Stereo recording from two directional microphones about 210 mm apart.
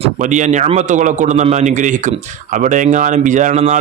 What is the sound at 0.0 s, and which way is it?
A man's voice, 35° right (ahead or behind).